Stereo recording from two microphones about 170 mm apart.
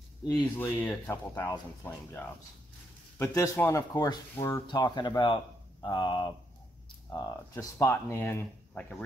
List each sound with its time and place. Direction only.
0.6 s speech: 10° left (ahead or behind); by 6.3 s 30° left (ahead or behind)
7.2 s speech: 15° left (ahead or behind)